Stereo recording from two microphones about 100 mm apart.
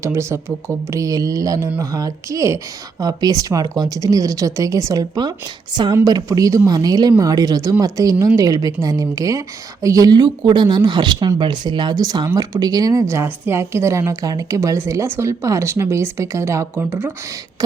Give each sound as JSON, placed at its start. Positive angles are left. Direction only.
{"t": 0.0, "sound": "speech", "side_deg": -25}